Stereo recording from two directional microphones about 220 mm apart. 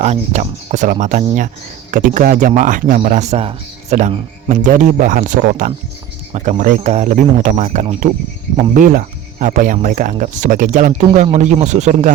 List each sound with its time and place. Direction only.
0.0 s speech: 30° right (ahead or behind)